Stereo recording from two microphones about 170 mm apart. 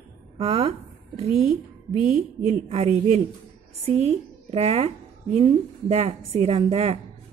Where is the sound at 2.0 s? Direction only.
45° right (ahead or behind).